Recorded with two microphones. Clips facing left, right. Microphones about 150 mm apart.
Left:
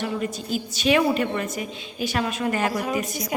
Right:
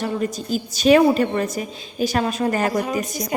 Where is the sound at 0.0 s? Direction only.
40° right (ahead or behind).